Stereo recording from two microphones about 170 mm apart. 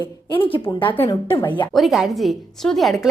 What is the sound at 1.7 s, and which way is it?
A woman's voice, centre (ahead or behind).